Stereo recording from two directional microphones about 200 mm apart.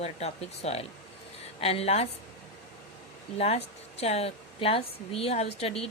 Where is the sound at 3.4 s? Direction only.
30° left (ahead or behind).